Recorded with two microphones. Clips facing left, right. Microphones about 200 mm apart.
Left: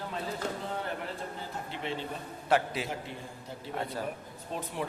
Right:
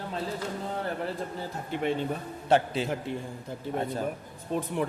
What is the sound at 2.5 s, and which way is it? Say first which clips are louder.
Speech: right 4 dB; 25° right (ahead or behind).